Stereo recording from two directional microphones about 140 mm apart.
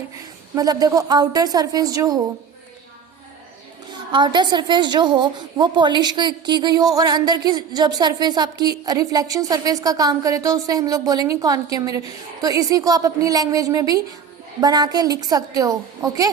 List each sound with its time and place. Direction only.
0.5 s a woman's voice: 25° right (ahead or behind)
4.1 s a woman's voice: 35° right (ahead or behind)